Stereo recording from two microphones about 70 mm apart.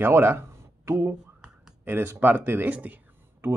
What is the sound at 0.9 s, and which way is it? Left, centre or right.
Speech, right.